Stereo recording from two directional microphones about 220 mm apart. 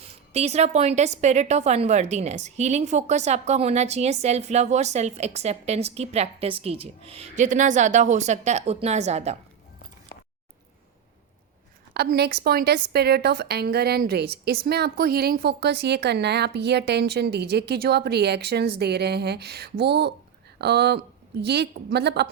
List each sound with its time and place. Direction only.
0.0 s a woman's voice: 30° right (ahead or behind)
11.9 s a woman's voice: 50° right (ahead or behind)